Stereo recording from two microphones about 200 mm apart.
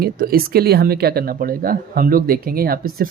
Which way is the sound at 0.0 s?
50° right (ahead or behind).